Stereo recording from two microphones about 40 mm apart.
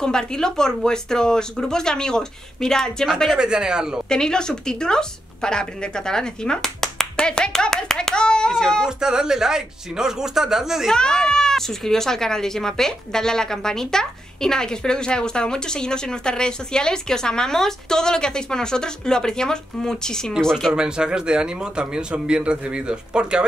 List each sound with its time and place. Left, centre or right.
0.0 s speech: centre
3.3 s speech: right
4.1 s a woman's voice: centre
8.5 s speech: centre
8.8 s speech: centre
10.9 s speech: centre
20.7 s speech: centre